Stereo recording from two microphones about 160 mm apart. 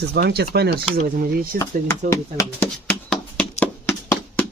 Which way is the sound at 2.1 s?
15° left (ahead or behind).